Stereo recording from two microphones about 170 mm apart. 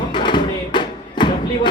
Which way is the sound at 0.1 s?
25° left (ahead or behind).